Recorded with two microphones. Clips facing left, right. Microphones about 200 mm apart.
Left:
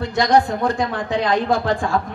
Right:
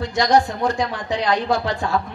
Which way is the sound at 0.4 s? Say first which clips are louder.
Left 2 dB; 55° left (ahead or behind).